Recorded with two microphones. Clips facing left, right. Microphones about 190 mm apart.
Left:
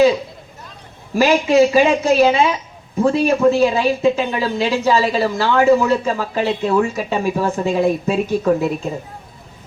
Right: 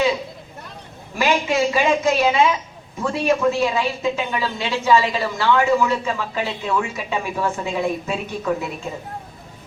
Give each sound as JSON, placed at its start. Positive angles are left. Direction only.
{"t": 1.2, "sound": "a woman's voice", "side_deg": 35}